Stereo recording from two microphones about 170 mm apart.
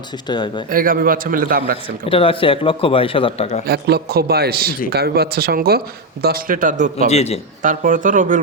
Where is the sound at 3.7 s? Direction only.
70° right (ahead or behind); by 7.1 s 50° right (ahead or behind).